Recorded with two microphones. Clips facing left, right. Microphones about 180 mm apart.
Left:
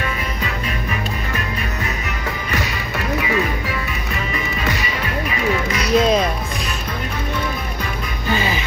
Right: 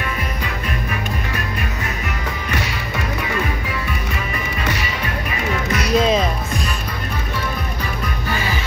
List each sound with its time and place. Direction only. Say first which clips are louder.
5.7 s music: even; centre (ahead or behind)
8.4 s music: left 3 dB; 20° left (ahead or behind)